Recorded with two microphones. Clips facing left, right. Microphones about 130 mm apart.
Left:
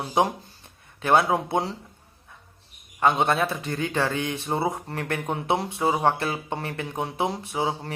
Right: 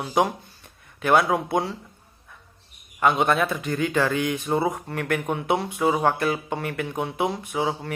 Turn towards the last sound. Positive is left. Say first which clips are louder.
# right 1 dB
turn(degrees=30)  # may be behind; listen again after turning